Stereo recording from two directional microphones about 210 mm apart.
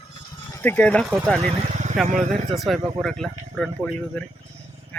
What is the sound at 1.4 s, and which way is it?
Speech, 35° right (ahead or behind).